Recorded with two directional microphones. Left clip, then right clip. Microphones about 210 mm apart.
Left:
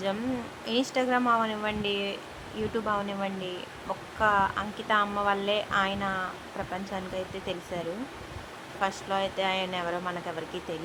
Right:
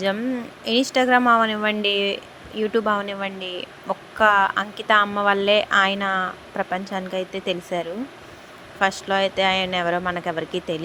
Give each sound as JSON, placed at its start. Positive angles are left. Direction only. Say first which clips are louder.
{"t": 0.6, "sound": "speech", "louder": "right 9 dB", "side_deg": -20}
{"t": 8.8, "sound": "speech", "louder": "right 9 dB", "side_deg": -20}